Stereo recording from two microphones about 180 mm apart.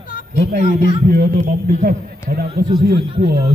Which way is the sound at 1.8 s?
50° right (ahead or behind).